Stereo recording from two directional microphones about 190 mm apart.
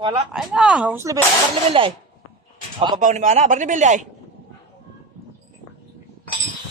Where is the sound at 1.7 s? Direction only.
30° right (ahead or behind).